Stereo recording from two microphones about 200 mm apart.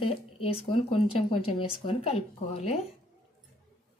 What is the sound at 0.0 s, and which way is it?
Speech, 30° left (ahead or behind).